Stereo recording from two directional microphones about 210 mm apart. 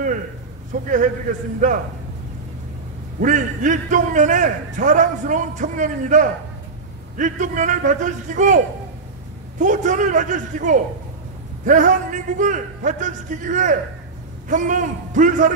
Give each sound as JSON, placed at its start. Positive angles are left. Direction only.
{"t": 0.7, "sound": "a man's voice", "side_deg": -35}
{"t": 3.2, "sound": "a man's voice", "side_deg": -35}
{"t": 9.6, "sound": "a man's voice", "side_deg": -35}